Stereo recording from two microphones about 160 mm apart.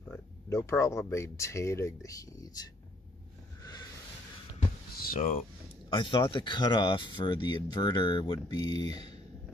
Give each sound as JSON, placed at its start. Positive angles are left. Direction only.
{"t": 0.1, "sound": "speech", "side_deg": 15}
{"t": 5.0, "sound": "speech", "side_deg": 60}
{"t": 5.9, "sound": "speech", "side_deg": 30}